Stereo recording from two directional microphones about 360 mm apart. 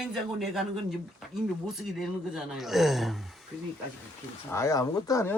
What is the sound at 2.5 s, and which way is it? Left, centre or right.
Speech, centre.